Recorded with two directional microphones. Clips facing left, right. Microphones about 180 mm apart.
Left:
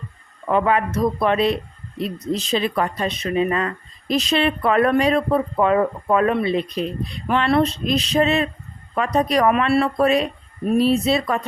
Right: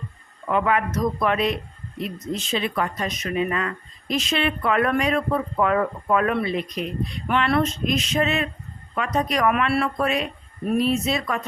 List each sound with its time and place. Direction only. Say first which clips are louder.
0.4 s speech: left 3 dB; 30° left (ahead or behind)